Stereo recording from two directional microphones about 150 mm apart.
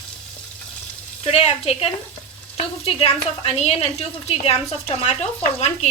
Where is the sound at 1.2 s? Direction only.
45° left (ahead or behind).